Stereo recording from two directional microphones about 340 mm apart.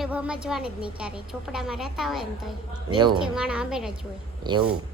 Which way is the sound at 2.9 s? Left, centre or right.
Centre.